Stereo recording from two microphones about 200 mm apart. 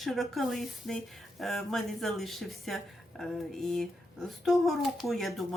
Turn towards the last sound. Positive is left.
turn(degrees=0)  # may be behind; listen again after turning